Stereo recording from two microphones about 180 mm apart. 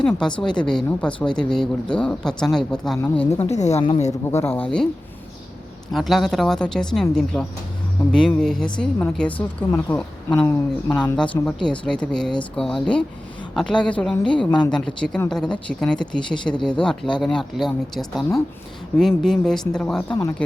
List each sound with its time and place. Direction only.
0.0 s speech: 5° left (ahead or behind)
3.4 s a woman's voice: 40° left (ahead or behind)
4.3 s speech: 15° left (ahead or behind)
5.9 s speech: centre (ahead or behind)
11.2 s speech: 5° left (ahead or behind)